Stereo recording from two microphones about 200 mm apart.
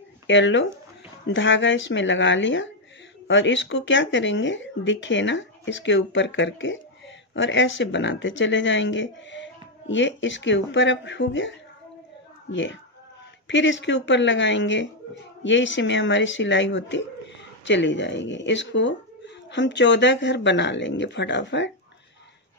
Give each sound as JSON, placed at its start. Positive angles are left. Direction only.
{"t": 0.3, "sound": "speech", "side_deg": 65}